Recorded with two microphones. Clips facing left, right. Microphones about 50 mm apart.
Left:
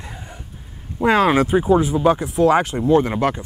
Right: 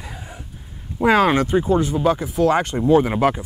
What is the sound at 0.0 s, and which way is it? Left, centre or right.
Vehicle, centre.